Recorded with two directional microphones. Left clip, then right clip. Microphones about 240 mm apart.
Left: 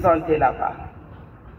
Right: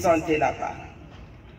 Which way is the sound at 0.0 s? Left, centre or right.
Right.